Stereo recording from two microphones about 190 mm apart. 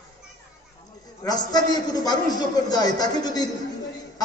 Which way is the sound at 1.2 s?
20° left (ahead or behind).